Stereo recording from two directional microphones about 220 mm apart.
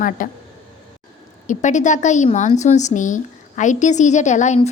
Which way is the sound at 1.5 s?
35° left (ahead or behind).